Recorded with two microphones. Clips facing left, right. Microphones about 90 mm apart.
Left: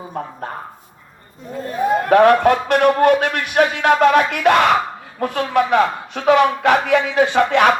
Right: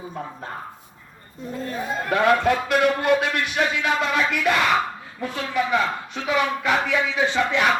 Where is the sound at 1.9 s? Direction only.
60° left (ahead or behind).